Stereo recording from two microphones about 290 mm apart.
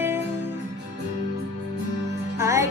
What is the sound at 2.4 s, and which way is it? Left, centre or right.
Music, centre.